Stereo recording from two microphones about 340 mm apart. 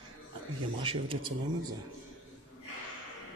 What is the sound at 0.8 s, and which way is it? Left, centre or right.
Speech, centre.